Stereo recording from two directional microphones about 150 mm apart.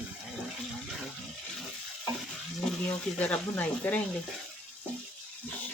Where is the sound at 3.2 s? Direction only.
10° left (ahead or behind).